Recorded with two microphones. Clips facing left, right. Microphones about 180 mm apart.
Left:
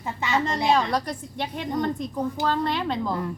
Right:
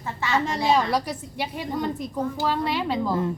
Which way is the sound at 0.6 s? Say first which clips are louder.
Right 1 dB; 5° right (ahead or behind).